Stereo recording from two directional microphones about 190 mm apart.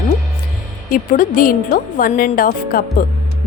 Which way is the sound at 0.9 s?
45° left (ahead or behind).